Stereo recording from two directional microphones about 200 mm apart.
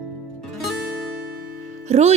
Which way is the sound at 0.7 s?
Centre (ahead or behind).